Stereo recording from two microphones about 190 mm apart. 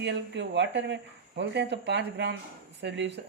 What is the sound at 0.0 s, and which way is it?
Speech, 65° right (ahead or behind).